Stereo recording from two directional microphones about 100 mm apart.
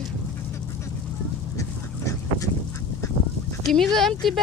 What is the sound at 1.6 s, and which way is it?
Duck, 35° left (ahead or behind).